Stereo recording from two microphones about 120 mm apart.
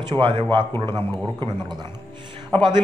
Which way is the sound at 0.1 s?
45° right (ahead or behind).